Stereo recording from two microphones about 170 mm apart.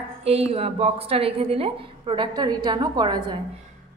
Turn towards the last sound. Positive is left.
turn(degrees=-25)  # may be behind; listen again after turning